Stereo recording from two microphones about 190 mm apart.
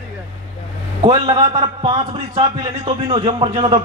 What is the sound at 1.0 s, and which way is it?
A man's voice, 25° right (ahead or behind).